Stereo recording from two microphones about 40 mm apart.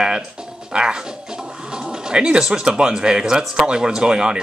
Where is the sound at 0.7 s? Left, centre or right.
Right.